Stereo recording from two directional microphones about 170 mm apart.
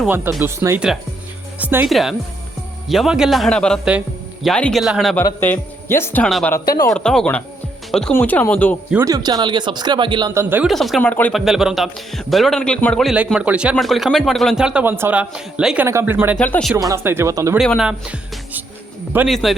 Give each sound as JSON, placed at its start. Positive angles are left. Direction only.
{"t": 0.4, "sound": "a man's voice", "side_deg": -15}
{"t": 5.2, "sound": "speech", "side_deg": 15}
{"t": 6.2, "sound": "a man's voice", "side_deg": 5}
{"t": 6.5, "sound": "speech", "side_deg": 20}
{"t": 6.9, "sound": "a man's voice", "side_deg": 5}
{"t": 9.0, "sound": "speech", "side_deg": -20}
{"t": 10.5, "sound": "a man's voice", "side_deg": -5}
{"t": 16.4, "sound": "speech", "side_deg": 5}
{"t": 16.7, "sound": "speech", "side_deg": -15}
{"t": 17.6, "sound": "a man's voice", "side_deg": 0}